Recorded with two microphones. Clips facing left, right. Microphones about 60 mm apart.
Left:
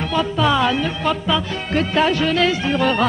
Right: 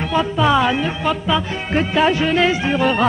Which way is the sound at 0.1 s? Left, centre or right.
Centre.